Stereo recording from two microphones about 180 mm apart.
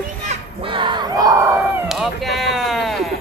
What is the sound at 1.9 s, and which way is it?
Speech, centre (ahead or behind).